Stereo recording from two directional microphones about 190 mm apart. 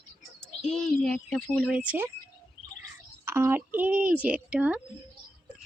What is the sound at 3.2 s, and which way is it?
Speech, 15° right (ahead or behind).